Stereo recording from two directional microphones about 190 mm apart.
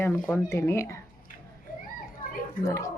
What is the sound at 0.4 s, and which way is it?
Speech, 15° left (ahead or behind).